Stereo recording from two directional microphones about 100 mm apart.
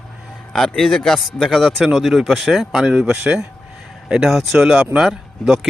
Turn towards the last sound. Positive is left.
turn(degrees=-5)  # may be behind; listen again after turning